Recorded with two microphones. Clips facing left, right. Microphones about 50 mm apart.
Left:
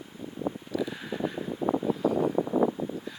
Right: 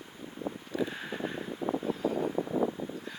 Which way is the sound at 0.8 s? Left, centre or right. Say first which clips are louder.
Even; centre.